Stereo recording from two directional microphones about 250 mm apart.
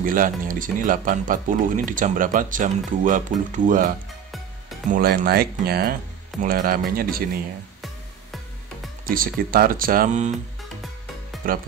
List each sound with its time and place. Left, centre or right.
0.0 s speech: right
4.9 s speech: right
9.0 s speech: right
11.4 s speech: right